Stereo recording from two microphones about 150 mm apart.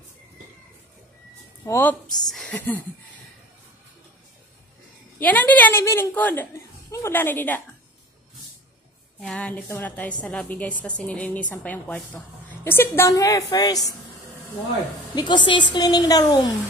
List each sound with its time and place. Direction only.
1.6 s speech: 15° left (ahead or behind)
2.2 s a woman's voice: 5° left (ahead or behind)
5.2 s a woman's voice: 10° left (ahead or behind)
9.2 s a woman's voice: 5° left (ahead or behind); by 13.8 s 25° left (ahead or behind)
15.1 s a woman's voice: 30° left (ahead or behind)